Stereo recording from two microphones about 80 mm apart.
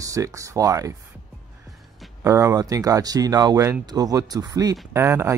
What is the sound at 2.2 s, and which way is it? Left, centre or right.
Speech, right.